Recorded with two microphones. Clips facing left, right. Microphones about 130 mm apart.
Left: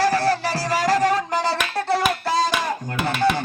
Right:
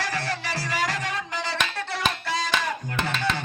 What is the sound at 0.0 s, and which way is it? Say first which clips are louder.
Music: left 10 dB; 35° left (ahead or behind).